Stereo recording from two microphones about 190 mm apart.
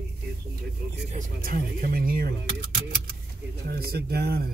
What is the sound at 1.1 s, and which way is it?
Speech, 50° right (ahead or behind).